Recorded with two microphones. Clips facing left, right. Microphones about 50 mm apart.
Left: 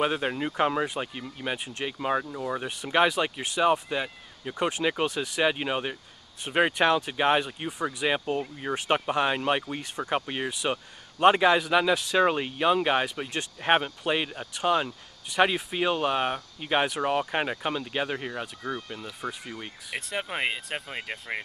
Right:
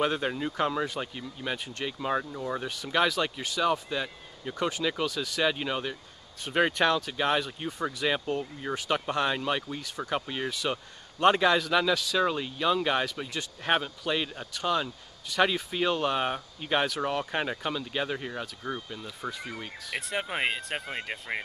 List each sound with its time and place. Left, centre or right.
0.0 s speech: centre
2.6 s speech: left
7.6 s speech: centre
8.7 s speech: left
9.0 s speech: centre
9.4 s speech: left
12.0 s speech: left; by 21.4 s centre